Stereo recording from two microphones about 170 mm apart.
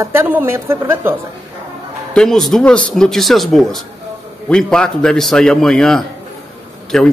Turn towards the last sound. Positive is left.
turn(degrees=5)  # may be behind; listen again after turning